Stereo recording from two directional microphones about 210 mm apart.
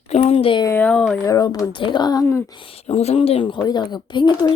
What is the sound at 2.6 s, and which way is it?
Speech, 25° left (ahead or behind).